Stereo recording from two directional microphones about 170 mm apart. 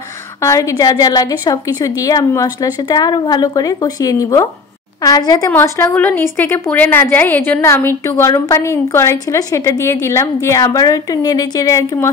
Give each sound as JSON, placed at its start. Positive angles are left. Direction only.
{"t": 0.4, "sound": "a woman's voice", "side_deg": 20}